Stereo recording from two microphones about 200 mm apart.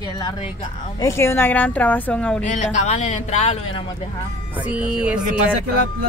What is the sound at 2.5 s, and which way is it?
Speech, 35° left (ahead or behind).